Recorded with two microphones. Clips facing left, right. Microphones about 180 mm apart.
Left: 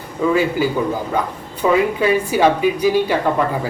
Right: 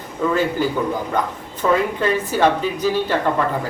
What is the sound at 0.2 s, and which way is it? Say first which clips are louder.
Speech: left 2 dB; 10° left (ahead or behind).